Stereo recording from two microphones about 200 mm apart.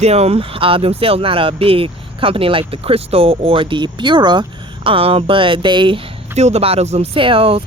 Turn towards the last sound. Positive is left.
turn(degrees=-25)  # may be behind; listen again after turning